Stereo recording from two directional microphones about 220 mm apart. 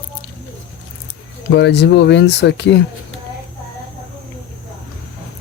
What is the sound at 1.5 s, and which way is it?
Speech, 50° left (ahead or behind).